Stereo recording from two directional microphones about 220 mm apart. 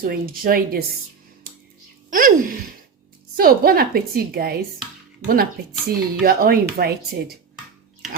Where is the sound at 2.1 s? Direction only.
40° right (ahead or behind).